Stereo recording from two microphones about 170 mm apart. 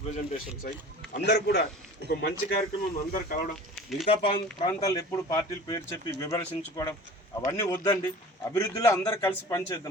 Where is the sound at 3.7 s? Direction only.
Centre (ahead or behind).